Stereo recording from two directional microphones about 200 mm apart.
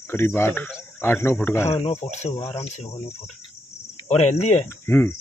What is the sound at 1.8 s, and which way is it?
Speech, 30° left (ahead or behind).